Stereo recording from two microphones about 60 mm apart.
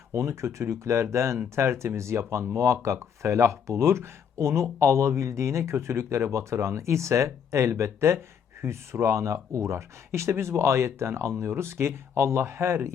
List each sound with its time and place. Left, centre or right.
0.1 s speech: right